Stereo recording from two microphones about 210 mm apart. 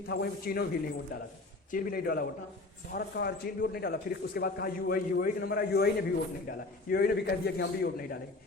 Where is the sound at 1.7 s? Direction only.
40° left (ahead or behind).